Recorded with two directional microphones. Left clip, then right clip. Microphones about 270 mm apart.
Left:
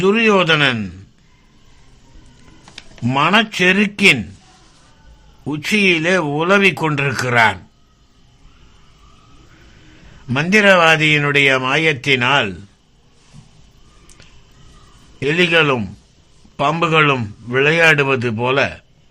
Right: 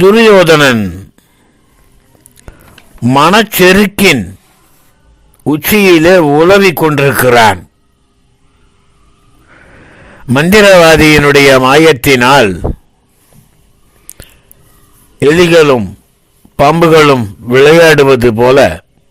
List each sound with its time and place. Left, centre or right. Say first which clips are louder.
0.1 s a man's voice: right 10 dB; right
3.0 s a man's voice: right 8 dB; right
5.5 s a man's voice: right 9 dB; right
10.1 s a man's voice: right 8 dB; right
15.2 s a man's voice: right 9 dB; right